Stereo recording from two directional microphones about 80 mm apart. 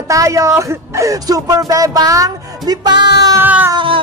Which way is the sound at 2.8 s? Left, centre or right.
Right.